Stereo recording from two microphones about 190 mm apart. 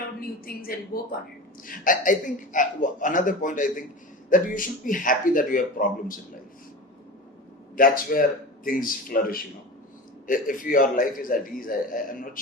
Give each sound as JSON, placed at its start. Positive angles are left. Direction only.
{"t": 0.9, "sound": "speech", "side_deg": 50}
{"t": 7.8, "sound": "speech", "side_deg": 50}